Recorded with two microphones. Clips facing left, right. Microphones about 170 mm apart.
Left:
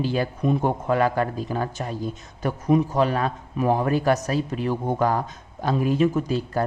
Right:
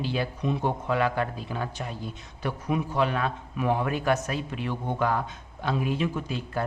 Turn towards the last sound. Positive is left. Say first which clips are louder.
# left 7 dB
turn(degrees=40)  # may be behind; listen again after turning